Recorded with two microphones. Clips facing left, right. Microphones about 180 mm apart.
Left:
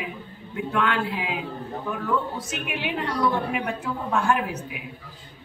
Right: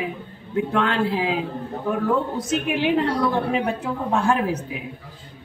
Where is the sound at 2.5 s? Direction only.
35° right (ahead or behind).